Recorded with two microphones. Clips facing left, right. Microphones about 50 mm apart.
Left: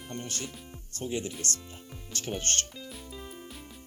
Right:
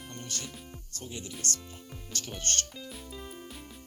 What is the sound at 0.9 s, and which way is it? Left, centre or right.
Speech, left.